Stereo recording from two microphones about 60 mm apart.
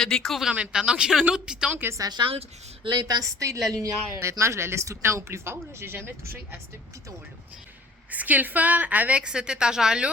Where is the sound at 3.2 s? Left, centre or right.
Right.